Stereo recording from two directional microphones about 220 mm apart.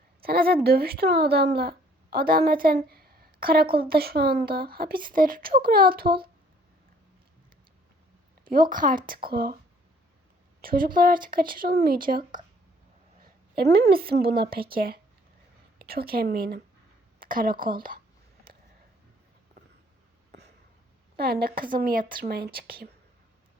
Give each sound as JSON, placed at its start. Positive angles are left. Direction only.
{"t": 0.2, "sound": "a woman's voice", "side_deg": -45}
{"t": 8.7, "sound": "speech", "side_deg": -40}
{"t": 10.6, "sound": "speech", "side_deg": -40}
{"t": 13.7, "sound": "a woman's voice", "side_deg": -45}
{"t": 21.2, "sound": "speech", "side_deg": -45}